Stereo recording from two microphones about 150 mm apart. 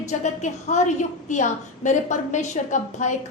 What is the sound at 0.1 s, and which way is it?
A woman's voice, 50° left (ahead or behind).